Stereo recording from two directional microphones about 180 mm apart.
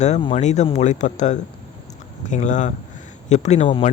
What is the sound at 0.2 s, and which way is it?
Speech, 30° left (ahead or behind).